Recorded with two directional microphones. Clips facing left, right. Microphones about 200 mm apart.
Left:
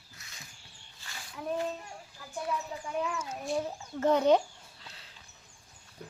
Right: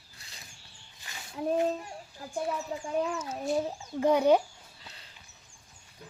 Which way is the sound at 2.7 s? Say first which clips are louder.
Right 5 dB; 35° right (ahead or behind).